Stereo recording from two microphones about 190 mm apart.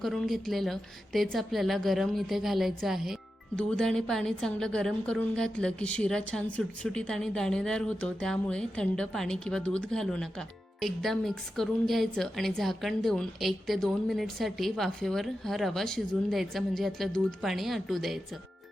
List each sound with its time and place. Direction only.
0.0 s a woman's voice: centre (ahead or behind)